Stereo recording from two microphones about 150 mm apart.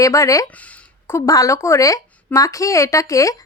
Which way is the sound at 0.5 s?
10° left (ahead or behind).